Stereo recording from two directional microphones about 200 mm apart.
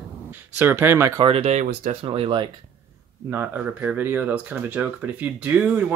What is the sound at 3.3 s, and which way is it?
Speech, 10° right (ahead or behind).